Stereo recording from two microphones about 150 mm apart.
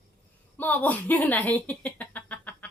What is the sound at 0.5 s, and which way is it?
Speech, 10° left (ahead or behind).